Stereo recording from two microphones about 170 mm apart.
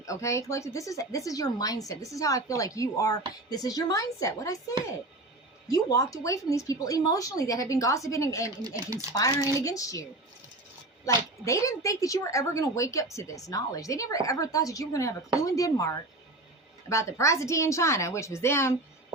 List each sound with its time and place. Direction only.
0.0 s a woman's voice: 20° left (ahead or behind)
5.6 s a woman's voice: 20° left (ahead or behind)
8.6 s speech: 20° right (ahead or behind)
9.1 s a woman's voice: 20° left (ahead or behind)